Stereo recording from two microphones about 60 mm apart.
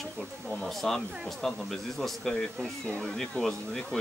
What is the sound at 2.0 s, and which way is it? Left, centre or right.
Speech, centre.